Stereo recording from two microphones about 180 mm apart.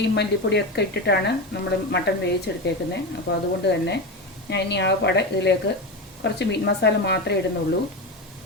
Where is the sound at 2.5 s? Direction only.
70° left (ahead or behind).